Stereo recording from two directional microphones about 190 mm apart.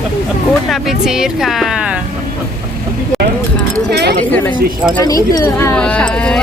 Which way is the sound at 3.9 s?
60° right (ahead or behind).